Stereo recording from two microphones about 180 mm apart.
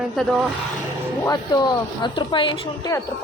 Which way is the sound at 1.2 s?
20° left (ahead or behind).